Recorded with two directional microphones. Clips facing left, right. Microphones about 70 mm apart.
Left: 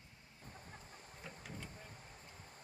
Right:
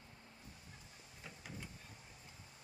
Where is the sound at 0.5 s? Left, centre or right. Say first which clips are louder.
Left 4 dB; left.